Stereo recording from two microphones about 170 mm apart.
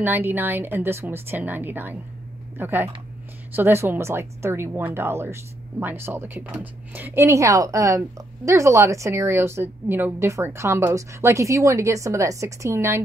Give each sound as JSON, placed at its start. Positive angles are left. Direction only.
{"t": 0.0, "sound": "a woman's voice", "side_deg": -10}